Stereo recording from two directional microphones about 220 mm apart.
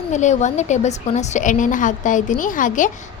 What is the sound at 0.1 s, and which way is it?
A woman's voice, 35° left (ahead or behind).